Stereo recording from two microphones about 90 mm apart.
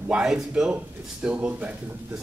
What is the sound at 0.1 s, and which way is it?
A man's voice, 10° right (ahead or behind).